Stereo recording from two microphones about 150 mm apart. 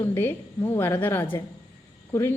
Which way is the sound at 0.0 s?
15° left (ahead or behind).